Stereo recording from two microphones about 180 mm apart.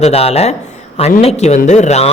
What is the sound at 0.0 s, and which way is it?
A man's voice, 35° left (ahead or behind).